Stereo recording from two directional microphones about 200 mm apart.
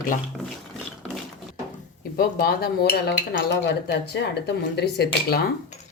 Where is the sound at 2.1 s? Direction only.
50° left (ahead or behind).